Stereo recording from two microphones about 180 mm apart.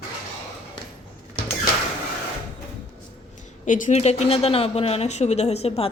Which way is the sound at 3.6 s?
45° left (ahead or behind).